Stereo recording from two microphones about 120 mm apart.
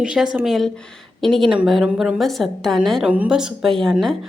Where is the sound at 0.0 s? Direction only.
5° right (ahead or behind).